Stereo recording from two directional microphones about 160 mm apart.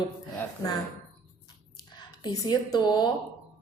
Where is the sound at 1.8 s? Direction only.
25° left (ahead or behind).